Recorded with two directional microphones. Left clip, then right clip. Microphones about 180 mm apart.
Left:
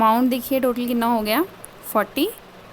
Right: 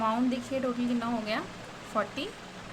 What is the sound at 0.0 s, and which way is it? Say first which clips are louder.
A woman's voice: left 11 dB; 65° left (ahead or behind).